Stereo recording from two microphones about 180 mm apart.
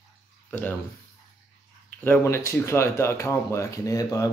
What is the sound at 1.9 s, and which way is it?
Speech, 10° left (ahead or behind).